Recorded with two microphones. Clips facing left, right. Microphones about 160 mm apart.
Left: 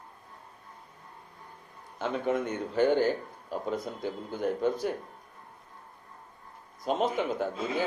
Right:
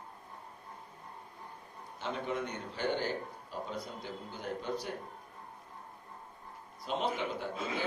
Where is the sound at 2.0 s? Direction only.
50° left (ahead or behind).